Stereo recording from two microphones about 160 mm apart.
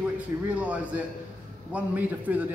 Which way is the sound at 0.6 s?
10° right (ahead or behind).